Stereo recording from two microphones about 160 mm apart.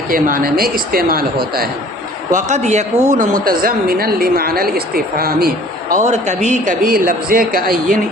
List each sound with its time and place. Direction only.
0.1 s a man's voice: 60° right (ahead or behind)
2.3 s a man's voice: 45° right (ahead or behind)
3.4 s a woman's voice: 65° right (ahead or behind)
5.9 s a man's voice: 50° right (ahead or behind)